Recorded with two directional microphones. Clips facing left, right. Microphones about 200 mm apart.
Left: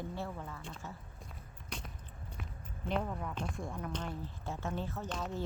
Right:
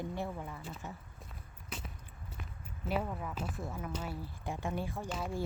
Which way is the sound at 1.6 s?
5° right (ahead or behind).